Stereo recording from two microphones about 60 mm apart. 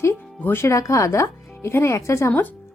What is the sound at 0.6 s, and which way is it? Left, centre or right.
Speech, left.